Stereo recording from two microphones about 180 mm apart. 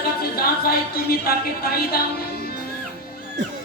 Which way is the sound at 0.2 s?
55° left (ahead or behind).